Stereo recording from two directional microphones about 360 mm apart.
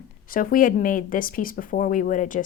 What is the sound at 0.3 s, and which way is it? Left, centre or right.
Speech, left.